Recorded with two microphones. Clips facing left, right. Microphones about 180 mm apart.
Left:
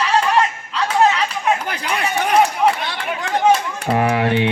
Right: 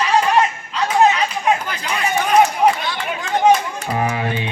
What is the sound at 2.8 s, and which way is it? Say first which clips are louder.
Chatter: even; 60° left (ahead or behind).